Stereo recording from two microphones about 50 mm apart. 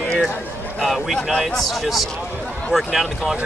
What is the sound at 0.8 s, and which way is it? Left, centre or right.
Speech, centre.